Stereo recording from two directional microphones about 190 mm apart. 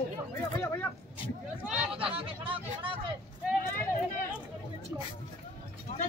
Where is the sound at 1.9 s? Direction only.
30° right (ahead or behind).